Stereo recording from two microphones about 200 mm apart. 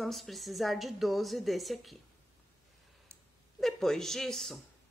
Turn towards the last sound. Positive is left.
turn(degrees=0)  # may be behind; listen again after turning